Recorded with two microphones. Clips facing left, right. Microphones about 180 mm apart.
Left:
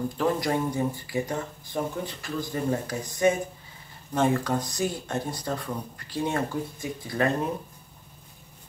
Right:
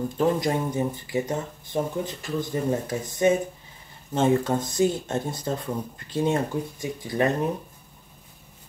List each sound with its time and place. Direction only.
0.2 s speech: 20° right (ahead or behind)